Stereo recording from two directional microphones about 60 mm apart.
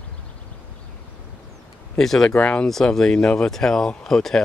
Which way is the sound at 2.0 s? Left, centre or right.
Centre.